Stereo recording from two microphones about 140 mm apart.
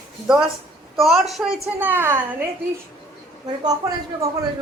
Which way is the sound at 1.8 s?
15° right (ahead or behind).